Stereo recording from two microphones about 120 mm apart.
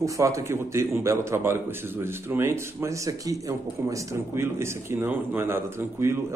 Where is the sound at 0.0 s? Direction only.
25° right (ahead or behind).